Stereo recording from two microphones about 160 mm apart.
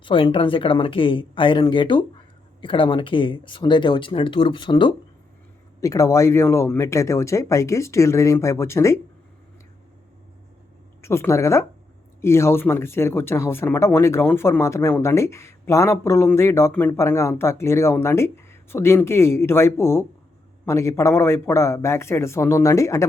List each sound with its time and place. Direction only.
0.0 s speech: 30° left (ahead or behind); by 9.0 s 15° left (ahead or behind)
11.0 s speech: 15° left (ahead or behind)